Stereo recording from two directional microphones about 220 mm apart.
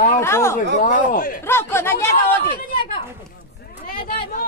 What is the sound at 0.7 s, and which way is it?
Speech, 35° left (ahead or behind).